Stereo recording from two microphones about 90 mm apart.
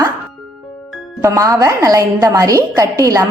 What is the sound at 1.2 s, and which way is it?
A woman's voice, 40° right (ahead or behind).